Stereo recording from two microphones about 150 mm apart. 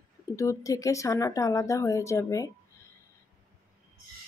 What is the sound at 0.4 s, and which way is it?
Speech, 20° left (ahead or behind).